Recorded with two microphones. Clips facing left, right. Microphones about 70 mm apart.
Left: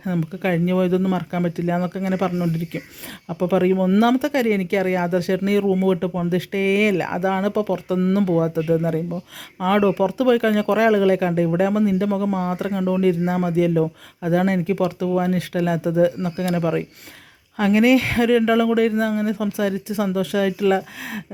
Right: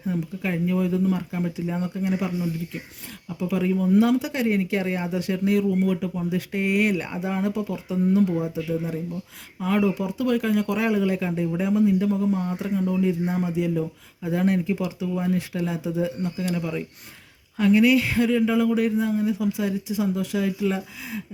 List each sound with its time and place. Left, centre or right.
0.0 s speech: left
7.0 s speech: left
9.6 s speech: left